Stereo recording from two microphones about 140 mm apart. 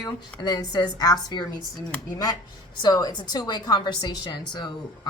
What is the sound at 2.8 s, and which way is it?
A woman's voice, 30° left (ahead or behind).